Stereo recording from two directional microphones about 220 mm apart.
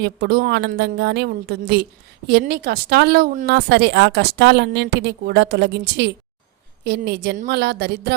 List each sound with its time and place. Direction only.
0.0 s a woman's voice: 50° right (ahead or behind)